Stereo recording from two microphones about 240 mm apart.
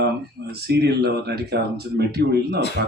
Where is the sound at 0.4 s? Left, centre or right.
Right.